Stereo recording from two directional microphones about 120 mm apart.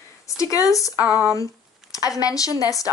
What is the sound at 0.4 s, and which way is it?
Speech, 30° left (ahead or behind).